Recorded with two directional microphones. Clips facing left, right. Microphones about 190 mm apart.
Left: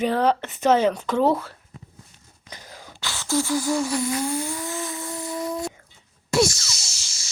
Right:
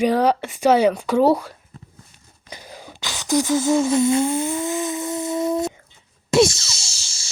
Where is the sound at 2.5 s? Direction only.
15° right (ahead or behind).